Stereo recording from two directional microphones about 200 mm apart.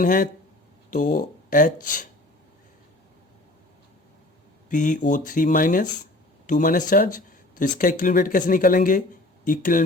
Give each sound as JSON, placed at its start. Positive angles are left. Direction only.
{"t": 0.0, "sound": "speech", "side_deg": 40}
{"t": 4.7, "sound": "speech", "side_deg": 40}